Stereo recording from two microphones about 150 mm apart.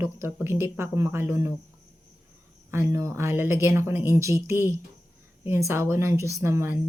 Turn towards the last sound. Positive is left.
turn(degrees=-15)  # may be behind; listen again after turning